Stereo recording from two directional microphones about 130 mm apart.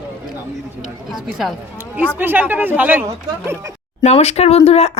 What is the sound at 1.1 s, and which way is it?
Speech, 5° right (ahead or behind).